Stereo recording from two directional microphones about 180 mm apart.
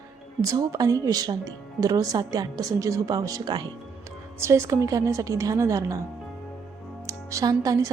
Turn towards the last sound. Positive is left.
turn(degrees=-20)  # may be behind; listen again after turning